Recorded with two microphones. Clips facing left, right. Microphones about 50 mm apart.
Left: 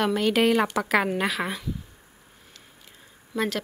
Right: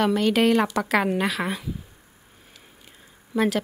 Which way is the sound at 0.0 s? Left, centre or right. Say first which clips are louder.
Right 2 dB; centre.